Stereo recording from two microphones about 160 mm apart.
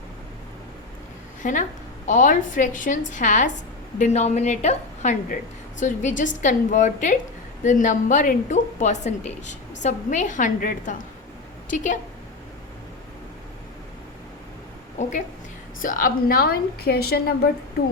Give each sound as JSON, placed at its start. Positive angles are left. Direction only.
{"t": 1.4, "sound": "a woman's voice", "side_deg": 55}
{"t": 15.8, "sound": "a woman's voice", "side_deg": 60}